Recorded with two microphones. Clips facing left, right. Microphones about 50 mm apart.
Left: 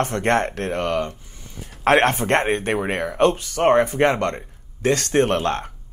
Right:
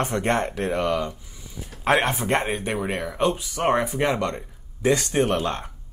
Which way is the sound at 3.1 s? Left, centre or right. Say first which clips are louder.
Left 6 dB; left.